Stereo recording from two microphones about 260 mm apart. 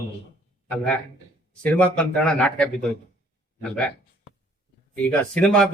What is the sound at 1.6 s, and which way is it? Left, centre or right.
A man's voice, centre.